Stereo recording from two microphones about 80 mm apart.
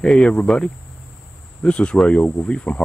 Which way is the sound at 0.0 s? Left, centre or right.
Centre.